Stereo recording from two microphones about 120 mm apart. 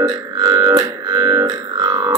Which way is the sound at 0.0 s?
35° right (ahead or behind).